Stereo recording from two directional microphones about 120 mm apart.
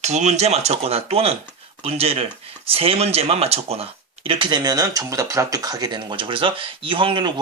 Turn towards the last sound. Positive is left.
turn(degrees=-45)  # may be behind; listen again after turning